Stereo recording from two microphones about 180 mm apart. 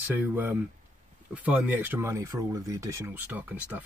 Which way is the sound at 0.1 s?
10° right (ahead or behind).